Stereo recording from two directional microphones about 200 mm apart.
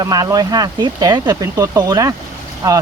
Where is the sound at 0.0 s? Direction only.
20° right (ahead or behind).